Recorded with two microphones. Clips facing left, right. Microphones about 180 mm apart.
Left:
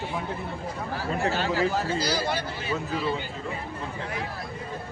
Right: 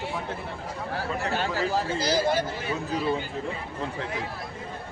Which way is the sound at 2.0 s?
50° right (ahead or behind).